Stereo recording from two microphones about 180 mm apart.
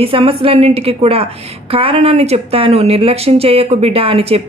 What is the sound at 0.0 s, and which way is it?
Speech, 30° right (ahead or behind).